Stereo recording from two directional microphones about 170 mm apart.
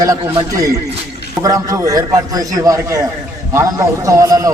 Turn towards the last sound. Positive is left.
turn(degrees=-20)  # may be behind; listen again after turning